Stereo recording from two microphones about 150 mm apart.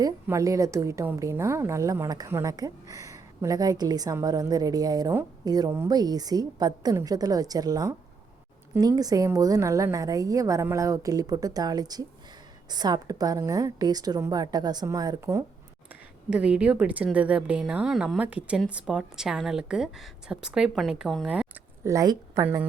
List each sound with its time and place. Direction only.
0.0 s a woman's voice: 20° right (ahead or behind)
15.9 s a woman's voice: 10° right (ahead or behind)
21.8 s a woman's voice: 25° right (ahead or behind)